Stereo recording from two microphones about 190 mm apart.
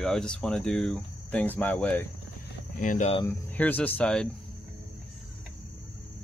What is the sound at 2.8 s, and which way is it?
Speech, 40° left (ahead or behind).